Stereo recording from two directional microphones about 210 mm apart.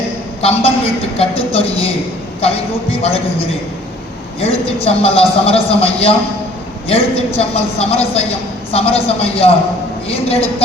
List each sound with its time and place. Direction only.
0.4 s a man's voice: 30° left (ahead or behind)
3.0 s a man's voice: 25° left (ahead or behind)